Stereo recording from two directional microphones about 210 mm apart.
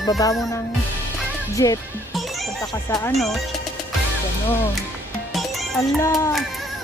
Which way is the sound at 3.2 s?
Centre (ahead or behind).